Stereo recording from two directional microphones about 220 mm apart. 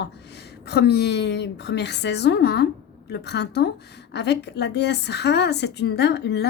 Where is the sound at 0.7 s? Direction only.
50° left (ahead or behind).